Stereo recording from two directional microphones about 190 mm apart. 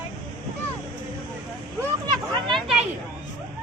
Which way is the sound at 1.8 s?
20° right (ahead or behind).